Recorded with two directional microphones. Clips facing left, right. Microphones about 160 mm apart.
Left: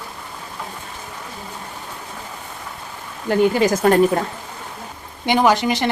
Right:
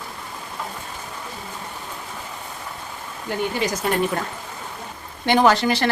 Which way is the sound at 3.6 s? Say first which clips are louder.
Left 8 dB; 50° left (ahead or behind).